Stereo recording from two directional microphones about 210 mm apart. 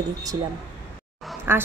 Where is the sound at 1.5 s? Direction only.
10° right (ahead or behind).